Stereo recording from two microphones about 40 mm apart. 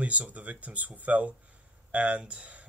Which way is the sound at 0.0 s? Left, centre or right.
Right.